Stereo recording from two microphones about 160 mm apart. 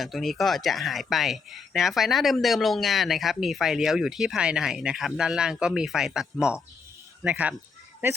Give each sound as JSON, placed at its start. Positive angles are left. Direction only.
{"t": 0.0, "sound": "speech", "side_deg": 0}